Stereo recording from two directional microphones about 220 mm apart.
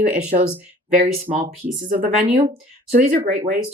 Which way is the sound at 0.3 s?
35° right (ahead or behind).